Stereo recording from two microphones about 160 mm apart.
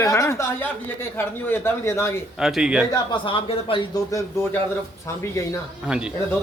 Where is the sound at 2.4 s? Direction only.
5° right (ahead or behind).